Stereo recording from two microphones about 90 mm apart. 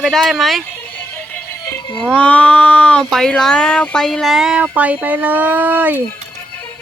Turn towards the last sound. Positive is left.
turn(degrees=-20)  # may be behind; listen again after turning